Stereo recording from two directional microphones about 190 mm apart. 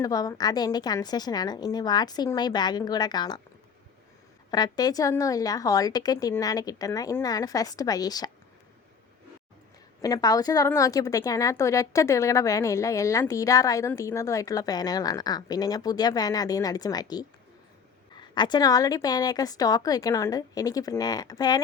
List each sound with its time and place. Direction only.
0.0 s a woman's voice: 20° left (ahead or behind)
4.5 s a woman's voice: 20° left (ahead or behind)
10.0 s a woman's voice: 20° left (ahead or behind)